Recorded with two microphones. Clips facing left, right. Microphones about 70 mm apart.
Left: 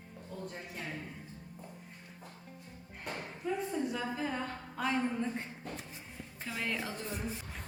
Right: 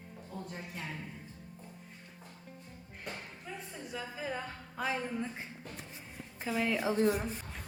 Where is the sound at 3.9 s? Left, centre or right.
Centre.